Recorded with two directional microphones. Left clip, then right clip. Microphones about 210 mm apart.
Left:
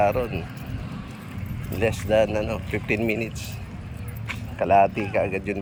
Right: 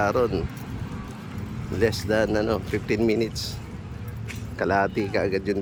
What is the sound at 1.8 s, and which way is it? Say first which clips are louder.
Speech: left 2 dB; 25° right (ahead or behind).